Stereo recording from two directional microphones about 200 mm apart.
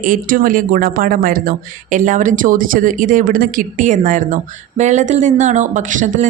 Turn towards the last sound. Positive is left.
turn(degrees=-40)  # may be behind; listen again after turning